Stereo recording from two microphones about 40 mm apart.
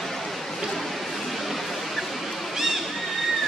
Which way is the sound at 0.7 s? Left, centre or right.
Centre.